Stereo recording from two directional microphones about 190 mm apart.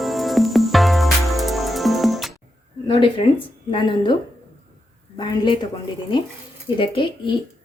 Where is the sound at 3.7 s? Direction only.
25° left (ahead or behind).